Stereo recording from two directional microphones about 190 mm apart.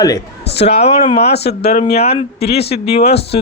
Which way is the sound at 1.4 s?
60° left (ahead or behind).